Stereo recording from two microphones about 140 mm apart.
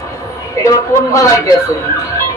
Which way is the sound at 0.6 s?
20° left (ahead or behind).